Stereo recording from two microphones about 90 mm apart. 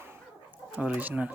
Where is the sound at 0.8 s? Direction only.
10° right (ahead or behind).